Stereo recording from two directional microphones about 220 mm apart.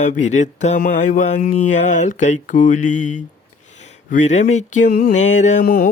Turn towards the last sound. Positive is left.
turn(degrees=45)  # may be behind; listen again after turning